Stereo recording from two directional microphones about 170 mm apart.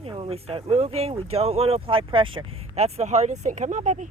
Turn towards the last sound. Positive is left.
turn(degrees=-45)  # may be behind; listen again after turning